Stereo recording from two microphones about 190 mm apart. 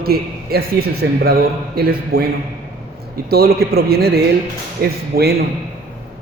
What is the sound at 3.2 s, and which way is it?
A man's voice, 55° right (ahead or behind).